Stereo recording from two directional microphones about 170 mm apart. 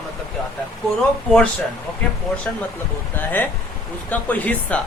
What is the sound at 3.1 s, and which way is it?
Speech, 10° left (ahead or behind).